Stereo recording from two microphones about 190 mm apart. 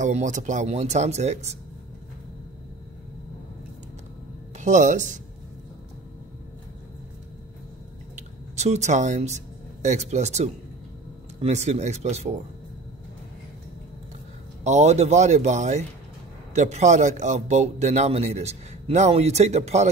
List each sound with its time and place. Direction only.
0.0 s speech: 40° right (ahead or behind)
4.6 s speech: 40° right (ahead or behind)
8.5 s speech: 35° right (ahead or behind)
14.6 s speech: 35° right (ahead or behind)